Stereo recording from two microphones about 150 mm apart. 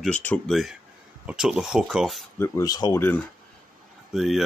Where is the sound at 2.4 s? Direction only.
20° left (ahead or behind).